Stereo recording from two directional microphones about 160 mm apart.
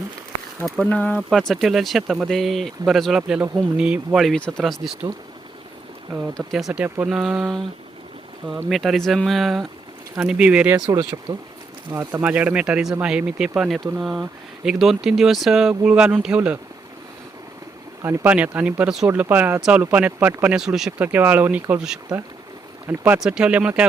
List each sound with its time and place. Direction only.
0.6 s speech: 5° left (ahead or behind)
6.3 s speech: centre (ahead or behind)
10.8 s speech: 25° right (ahead or behind); by 16.6 s 5° right (ahead or behind)
18.0 s speech: 15° right (ahead or behind)